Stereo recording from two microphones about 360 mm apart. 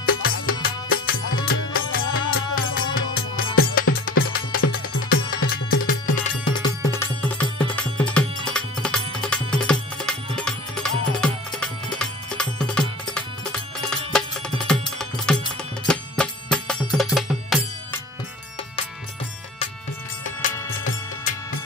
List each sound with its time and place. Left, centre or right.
0.0 s music: left
6.4 s music: centre
20.8 s music: left